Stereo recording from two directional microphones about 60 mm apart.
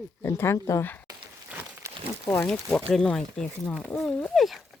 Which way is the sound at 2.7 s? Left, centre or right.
Centre.